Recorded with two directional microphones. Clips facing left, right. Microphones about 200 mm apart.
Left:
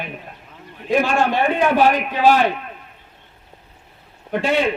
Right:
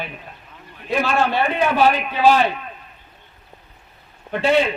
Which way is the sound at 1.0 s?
15° left (ahead or behind).